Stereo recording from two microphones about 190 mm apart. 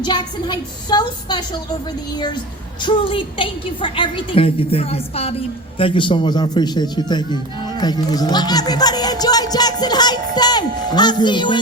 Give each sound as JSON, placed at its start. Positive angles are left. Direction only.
{"t": 0.0, "sound": "a woman's voice", "side_deg": 25}